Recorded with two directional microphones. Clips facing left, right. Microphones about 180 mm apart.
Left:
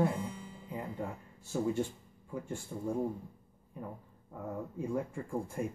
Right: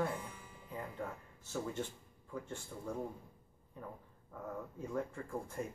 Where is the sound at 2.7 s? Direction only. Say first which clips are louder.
Left 7 dB; 15° left (ahead or behind).